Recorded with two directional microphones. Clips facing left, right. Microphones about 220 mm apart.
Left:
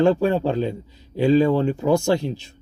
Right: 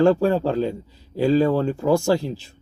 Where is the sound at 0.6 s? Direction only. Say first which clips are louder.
Right 1 dB; 35° right (ahead or behind).